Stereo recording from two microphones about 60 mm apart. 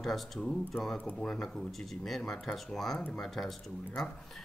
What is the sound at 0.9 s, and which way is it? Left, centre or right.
Speech, centre.